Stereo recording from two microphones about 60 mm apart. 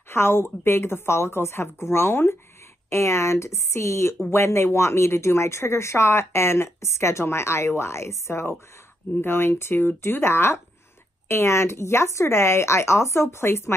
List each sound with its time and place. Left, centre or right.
0.1 s speech: left
9.1 s speech: left